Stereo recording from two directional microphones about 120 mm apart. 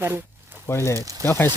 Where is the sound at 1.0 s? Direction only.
30° right (ahead or behind).